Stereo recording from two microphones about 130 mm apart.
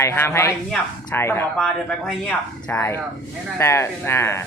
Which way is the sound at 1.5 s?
5° left (ahead or behind).